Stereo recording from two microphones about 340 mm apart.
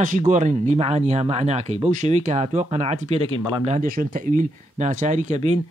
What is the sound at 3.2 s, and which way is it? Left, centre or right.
Speech, left.